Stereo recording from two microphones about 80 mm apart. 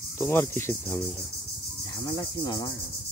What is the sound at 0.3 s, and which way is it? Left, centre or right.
Cricket, left.